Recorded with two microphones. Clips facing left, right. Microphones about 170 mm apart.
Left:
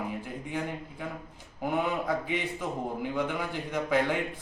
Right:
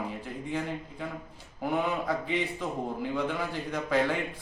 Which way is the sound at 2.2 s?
15° left (ahead or behind).